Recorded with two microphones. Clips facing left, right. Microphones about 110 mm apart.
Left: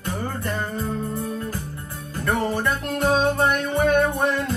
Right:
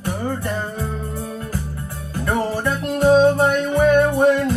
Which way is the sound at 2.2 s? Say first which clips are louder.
Right 2 dB; 15° right (ahead or behind).